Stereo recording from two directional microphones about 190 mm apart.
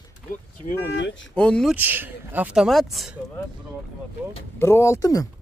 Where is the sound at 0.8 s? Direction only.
70° left (ahead or behind).